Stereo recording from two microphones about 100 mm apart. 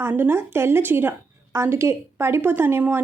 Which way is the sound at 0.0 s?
25° right (ahead or behind).